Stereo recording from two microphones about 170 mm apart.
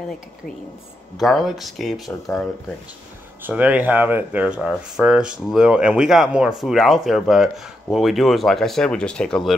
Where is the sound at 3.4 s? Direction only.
10° right (ahead or behind).